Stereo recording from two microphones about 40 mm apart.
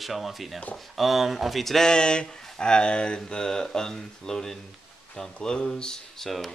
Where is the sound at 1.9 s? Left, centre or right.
Left.